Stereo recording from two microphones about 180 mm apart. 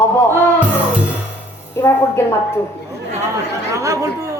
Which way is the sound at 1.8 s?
15° left (ahead or behind).